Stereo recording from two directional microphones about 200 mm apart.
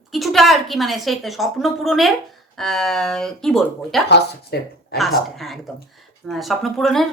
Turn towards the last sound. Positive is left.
turn(degrees=0)  # may be behind; listen again after turning